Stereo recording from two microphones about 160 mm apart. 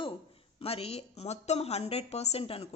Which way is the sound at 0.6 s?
40° left (ahead or behind).